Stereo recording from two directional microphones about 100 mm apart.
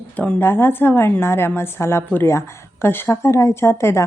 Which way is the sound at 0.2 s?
20° left (ahead or behind).